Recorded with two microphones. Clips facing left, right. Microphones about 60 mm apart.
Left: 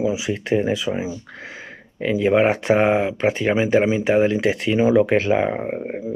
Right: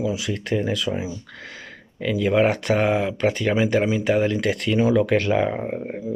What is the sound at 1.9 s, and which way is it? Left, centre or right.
Speech, left.